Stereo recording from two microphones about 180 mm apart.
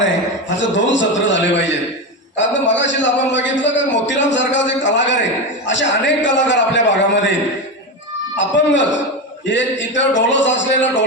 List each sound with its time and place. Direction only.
0.6 s a man's voice: 90° left
8.4 s a man's voice: 90° left